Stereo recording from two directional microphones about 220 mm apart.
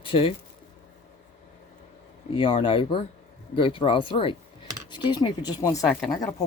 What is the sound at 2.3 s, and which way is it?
Speech, 25° left (ahead or behind).